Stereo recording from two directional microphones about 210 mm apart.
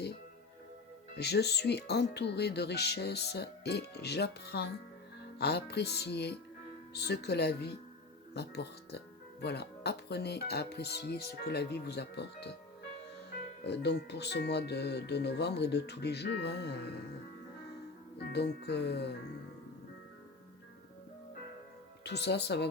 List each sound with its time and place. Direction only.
1.1 s speech: 50° left (ahead or behind)
13.7 s speech: 55° left (ahead or behind)
18.3 s speech: 55° left (ahead or behind)
22.0 s speech: 55° left (ahead or behind)